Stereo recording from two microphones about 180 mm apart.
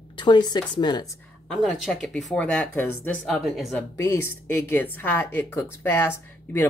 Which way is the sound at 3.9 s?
15° left (ahead or behind).